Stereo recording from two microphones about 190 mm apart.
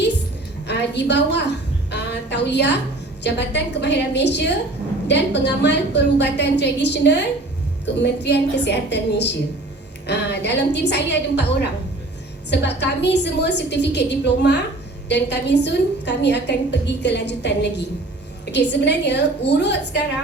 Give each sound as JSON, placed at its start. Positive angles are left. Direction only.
{"t": 0.7, "sound": "a woman's voice", "side_deg": 65}
{"t": 1.9, "sound": "a sound", "side_deg": 65}
{"t": 3.2, "sound": "a woman's voice", "side_deg": 65}
{"t": 12.5, "sound": "a woman's voice", "side_deg": 65}